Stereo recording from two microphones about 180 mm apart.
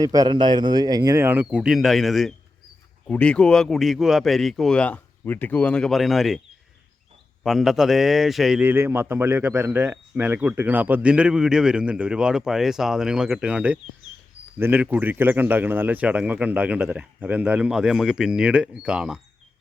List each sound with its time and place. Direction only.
0.0 s a man's voice: 20° right (ahead or behind); by 6.4 s centre (ahead or behind)
7.4 s a man's voice: centre (ahead or behind)